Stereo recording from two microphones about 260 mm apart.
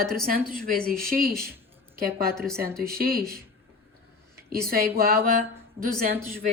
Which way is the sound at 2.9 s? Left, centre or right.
Right.